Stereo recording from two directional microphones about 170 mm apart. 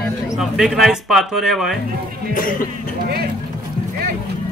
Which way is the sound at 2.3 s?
55° left (ahead or behind).